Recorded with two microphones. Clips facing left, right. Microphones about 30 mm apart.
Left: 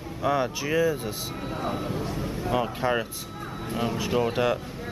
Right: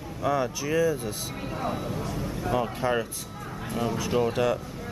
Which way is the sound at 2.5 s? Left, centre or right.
Centre.